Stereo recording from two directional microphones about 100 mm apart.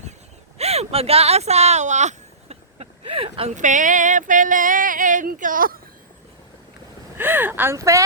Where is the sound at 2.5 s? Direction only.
80° right.